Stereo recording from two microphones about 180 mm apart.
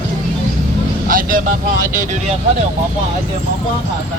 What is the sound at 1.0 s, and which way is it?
Speech, 50° right (ahead or behind).